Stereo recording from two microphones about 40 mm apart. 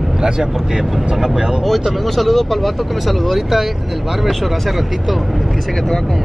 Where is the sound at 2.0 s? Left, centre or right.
Centre.